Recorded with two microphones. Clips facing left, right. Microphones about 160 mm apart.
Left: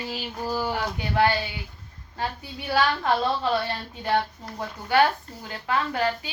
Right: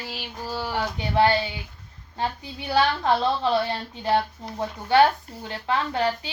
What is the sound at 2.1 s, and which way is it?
Speech, 25° right (ahead or behind).